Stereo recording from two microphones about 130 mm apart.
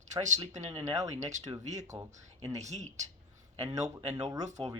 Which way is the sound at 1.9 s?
50° right (ahead or behind).